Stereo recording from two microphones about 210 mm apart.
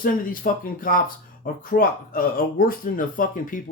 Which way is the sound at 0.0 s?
40° left (ahead or behind).